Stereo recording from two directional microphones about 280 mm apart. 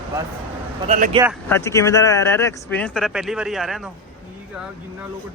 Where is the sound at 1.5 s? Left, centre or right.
Centre.